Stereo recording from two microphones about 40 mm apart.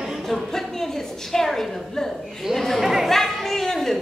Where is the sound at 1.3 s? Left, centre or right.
Centre.